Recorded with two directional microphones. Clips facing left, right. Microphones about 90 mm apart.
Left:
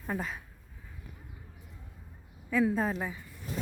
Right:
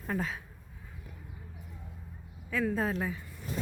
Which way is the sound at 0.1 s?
5° left (ahead or behind).